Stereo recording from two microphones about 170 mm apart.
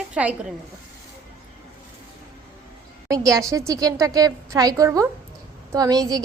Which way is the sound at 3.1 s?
20° right (ahead or behind).